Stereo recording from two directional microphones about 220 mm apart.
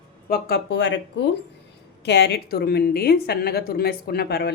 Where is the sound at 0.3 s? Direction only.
45° left (ahead or behind).